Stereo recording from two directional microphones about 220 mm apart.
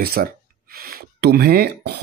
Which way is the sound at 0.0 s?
40° right (ahead or behind).